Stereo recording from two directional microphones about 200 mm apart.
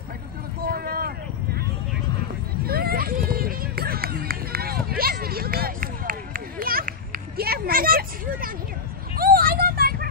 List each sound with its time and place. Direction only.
0.6 s vehicle: 45° right (ahead or behind)
2.6 s run: 50° right (ahead or behind)
9.1 s vehicle: 45° right (ahead or behind)